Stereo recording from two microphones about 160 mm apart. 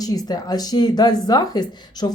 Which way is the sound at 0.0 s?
20° left (ahead or behind).